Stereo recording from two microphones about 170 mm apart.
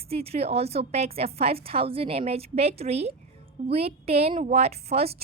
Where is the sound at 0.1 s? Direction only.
35° right (ahead or behind).